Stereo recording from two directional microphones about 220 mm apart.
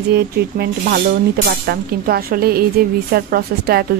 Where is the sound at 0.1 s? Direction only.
45° right (ahead or behind).